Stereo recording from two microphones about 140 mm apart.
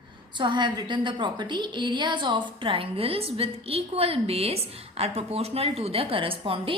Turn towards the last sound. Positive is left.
turn(degrees=-40)  # may be behind; listen again after turning